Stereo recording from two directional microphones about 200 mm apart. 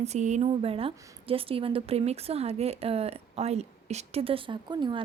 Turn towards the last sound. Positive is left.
turn(degrees=-25)  # may be behind; listen again after turning